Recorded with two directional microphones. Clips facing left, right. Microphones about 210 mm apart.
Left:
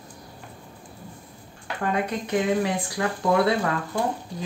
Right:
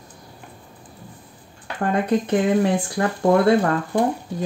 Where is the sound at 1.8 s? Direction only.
50° right (ahead or behind).